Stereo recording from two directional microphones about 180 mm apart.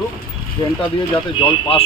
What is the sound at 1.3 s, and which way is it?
Speech, 30° left (ahead or behind).